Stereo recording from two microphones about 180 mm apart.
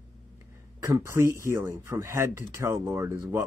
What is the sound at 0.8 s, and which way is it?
Speech, 15° right (ahead or behind).